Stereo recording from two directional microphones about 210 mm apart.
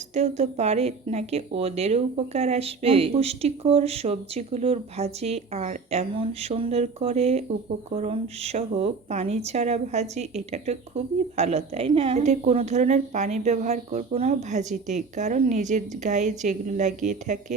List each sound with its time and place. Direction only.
0.1 s speech: 30° right (ahead or behind)